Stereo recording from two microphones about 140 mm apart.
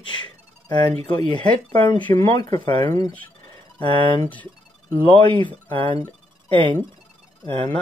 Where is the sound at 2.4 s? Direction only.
30° left (ahead or behind).